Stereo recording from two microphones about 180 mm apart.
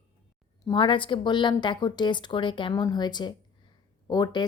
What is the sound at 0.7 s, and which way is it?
A woman's voice, 25° left (ahead or behind).